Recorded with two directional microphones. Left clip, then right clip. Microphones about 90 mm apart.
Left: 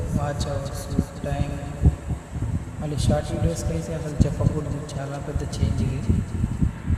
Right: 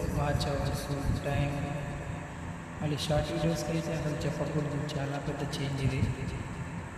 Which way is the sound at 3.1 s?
5° left (ahead or behind).